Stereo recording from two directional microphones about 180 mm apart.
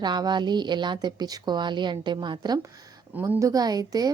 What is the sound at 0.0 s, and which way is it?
Speech, 25° right (ahead or behind).